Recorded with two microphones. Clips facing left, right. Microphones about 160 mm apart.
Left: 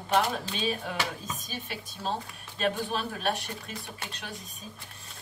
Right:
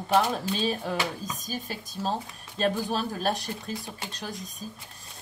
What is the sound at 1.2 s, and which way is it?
Speech, 40° right (ahead or behind).